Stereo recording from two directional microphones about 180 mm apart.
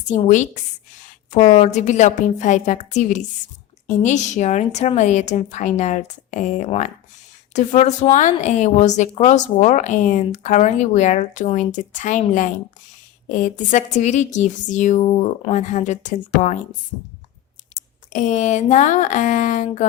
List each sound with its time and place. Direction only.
0.3 s speech: 40° left (ahead or behind)
17.7 s a sound: 45° left (ahead or behind)
18.1 s speech: 45° left (ahead or behind)